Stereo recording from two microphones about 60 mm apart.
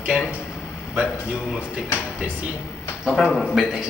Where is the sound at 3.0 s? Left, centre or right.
Centre.